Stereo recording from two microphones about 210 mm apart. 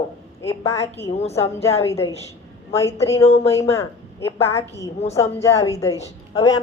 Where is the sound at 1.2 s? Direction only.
30° left (ahead or behind).